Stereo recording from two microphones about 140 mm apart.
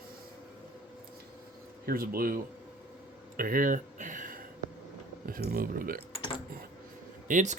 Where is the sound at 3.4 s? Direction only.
80° right.